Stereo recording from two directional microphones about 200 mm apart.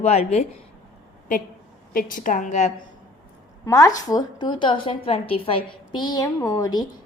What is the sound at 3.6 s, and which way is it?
A woman's voice, 15° left (ahead or behind).